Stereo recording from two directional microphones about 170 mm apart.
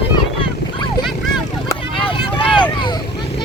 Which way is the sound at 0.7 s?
25° left (ahead or behind).